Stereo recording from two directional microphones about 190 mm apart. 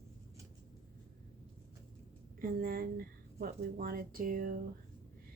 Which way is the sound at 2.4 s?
50° right (ahead or behind).